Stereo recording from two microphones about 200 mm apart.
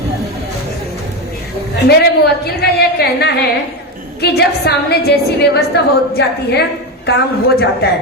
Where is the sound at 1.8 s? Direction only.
55° left (ahead or behind).